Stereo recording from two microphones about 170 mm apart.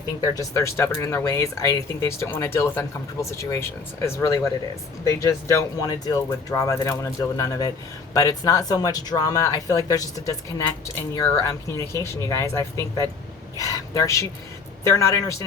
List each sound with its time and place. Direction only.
0.2 s speech: 20° left (ahead or behind)